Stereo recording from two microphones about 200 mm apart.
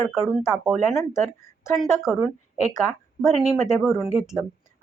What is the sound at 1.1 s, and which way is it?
Speech, 15° left (ahead or behind).